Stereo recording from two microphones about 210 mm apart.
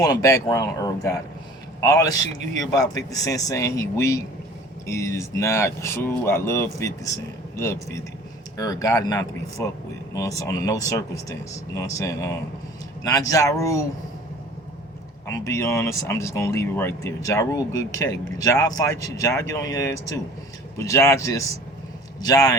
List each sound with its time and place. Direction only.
0.0 s speech: 15° left (ahead or behind)
15.3 s speech: 15° left (ahead or behind)